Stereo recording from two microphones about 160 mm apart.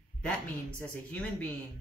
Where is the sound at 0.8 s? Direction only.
10° left (ahead or behind).